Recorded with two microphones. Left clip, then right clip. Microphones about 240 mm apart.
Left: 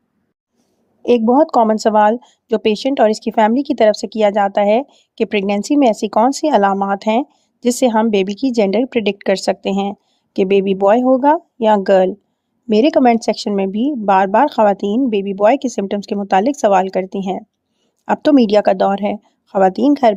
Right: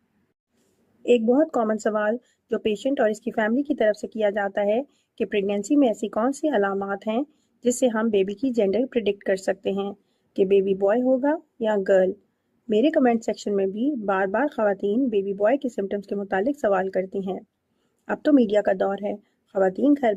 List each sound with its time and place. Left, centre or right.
1.0 s a woman's voice: left